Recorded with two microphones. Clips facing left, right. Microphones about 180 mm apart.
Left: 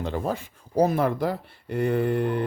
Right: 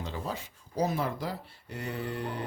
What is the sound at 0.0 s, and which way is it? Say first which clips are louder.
Speech: left 8 dB; 55° left (ahead or behind).